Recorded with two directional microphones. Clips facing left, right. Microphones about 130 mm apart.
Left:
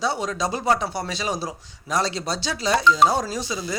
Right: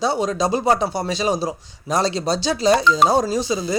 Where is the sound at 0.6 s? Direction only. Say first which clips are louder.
Right 4 dB; 35° right (ahead or behind).